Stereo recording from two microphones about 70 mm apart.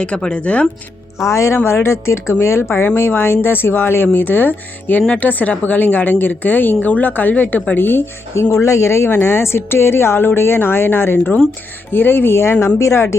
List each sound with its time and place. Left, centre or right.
0.0 s speech: centre
1.3 s a woman's voice: left